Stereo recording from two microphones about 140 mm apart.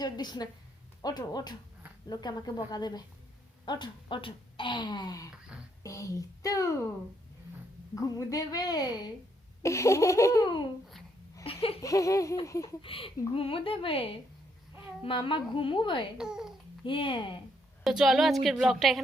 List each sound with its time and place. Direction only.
0.0 s a woman's voice: 30° left (ahead or behind)
5.3 s a sound: 5° right (ahead or behind)
5.8 s a woman's voice: 25° left (ahead or behind)
7.9 s a woman's voice: 25° left (ahead or behind)
11.4 s laughter: 45° left (ahead or behind)
11.8 s a woman's voice: 20° left (ahead or behind)
12.8 s speech: 40° left (ahead or behind)
16.1 s a woman's voice: 5° right (ahead or behind)
16.8 s speech: 35° left (ahead or behind)
17.8 s a woman's voice: centre (ahead or behind)